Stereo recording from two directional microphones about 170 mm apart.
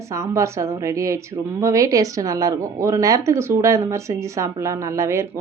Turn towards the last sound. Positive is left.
turn(degrees=-15)  # may be behind; listen again after turning